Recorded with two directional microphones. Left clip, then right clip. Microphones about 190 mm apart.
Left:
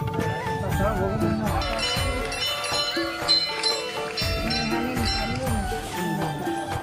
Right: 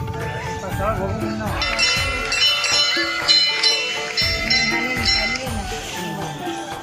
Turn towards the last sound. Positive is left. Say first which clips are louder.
# right 7 dB
turn(degrees=45)  # may be behind; listen again after turning